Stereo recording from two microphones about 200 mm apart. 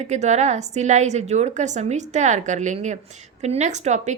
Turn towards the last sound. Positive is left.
turn(degrees=-35)  # may be behind; listen again after turning